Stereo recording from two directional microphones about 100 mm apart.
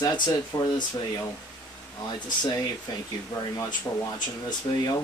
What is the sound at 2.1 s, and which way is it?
Speech, 45° left (ahead or behind).